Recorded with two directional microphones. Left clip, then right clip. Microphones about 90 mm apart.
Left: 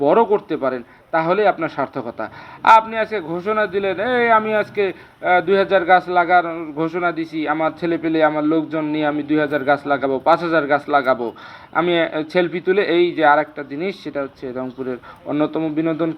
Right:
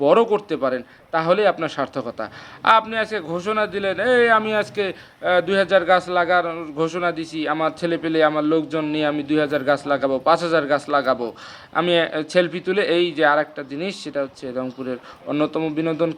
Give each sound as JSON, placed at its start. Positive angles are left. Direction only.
{"t": 0.0, "sound": "a man's voice", "side_deg": -30}
{"t": 3.0, "sound": "a man's voice", "side_deg": -25}
{"t": 3.6, "sound": "a man's voice", "side_deg": -15}
{"t": 6.5, "sound": "a man's voice", "side_deg": -30}